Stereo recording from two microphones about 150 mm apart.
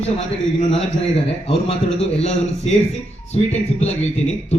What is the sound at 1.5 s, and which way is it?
Speech, 40° left (ahead or behind).